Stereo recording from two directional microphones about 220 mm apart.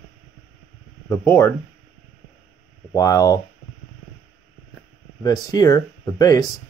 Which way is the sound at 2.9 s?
15° left (ahead or behind).